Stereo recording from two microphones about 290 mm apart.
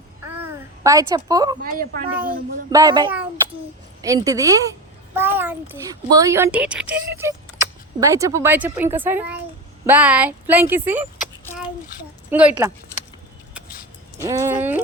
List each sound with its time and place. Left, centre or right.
0.3 s a sound: centre
1.6 s a child's voice: right
2.6 s speech: centre
12.3 s speech: centre
14.2 s speech: centre